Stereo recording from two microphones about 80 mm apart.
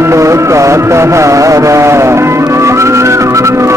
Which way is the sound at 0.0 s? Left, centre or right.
Right.